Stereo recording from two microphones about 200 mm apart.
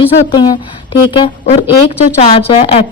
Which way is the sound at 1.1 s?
25° left (ahead or behind).